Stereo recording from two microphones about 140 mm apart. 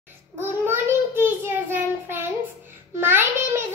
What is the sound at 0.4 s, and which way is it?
Child singing, 15° right (ahead or behind).